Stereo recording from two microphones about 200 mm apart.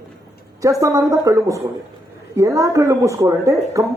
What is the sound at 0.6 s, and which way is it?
A woman's voice, 15° right (ahead or behind).